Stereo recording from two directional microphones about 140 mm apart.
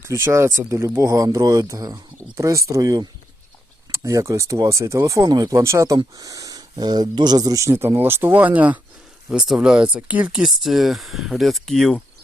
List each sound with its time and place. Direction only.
0.0 s speech: 20° right (ahead or behind); by 12.0 s 5° left (ahead or behind)